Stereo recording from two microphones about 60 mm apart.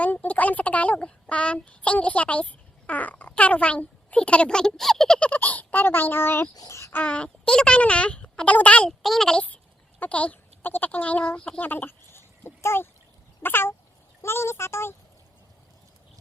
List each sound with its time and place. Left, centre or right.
0.0 s a woman's voice: left; by 5.2 s centre
5.2 s speech: left
6.5 s a child's voice: left
6.9 s speech: left
8.9 s speech: centre
10.0 s speech: left
11.3 s speech: centre
11.6 s a sound: left
13.4 s a child's voice: left